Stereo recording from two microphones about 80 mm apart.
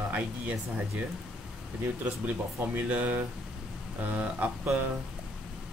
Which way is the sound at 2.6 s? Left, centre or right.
Centre.